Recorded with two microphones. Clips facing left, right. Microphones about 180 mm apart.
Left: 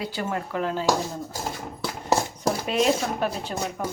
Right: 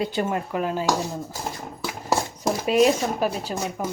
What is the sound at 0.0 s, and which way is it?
Speech, 20° right (ahead or behind).